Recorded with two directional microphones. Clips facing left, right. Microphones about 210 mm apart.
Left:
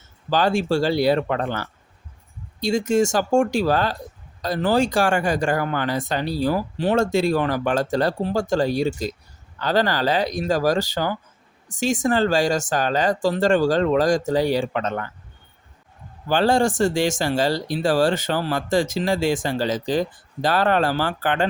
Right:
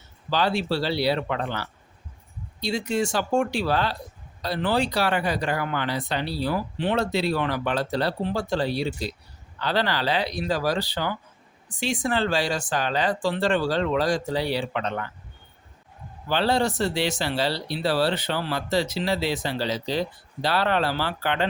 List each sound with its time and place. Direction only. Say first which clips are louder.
0.3 s speech: left 4 dB; 45° left (ahead or behind)
16.3 s speech: left 4 dB; 45° left (ahead or behind)